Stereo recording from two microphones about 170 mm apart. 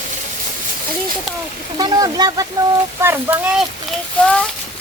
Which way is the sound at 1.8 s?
25° right (ahead or behind).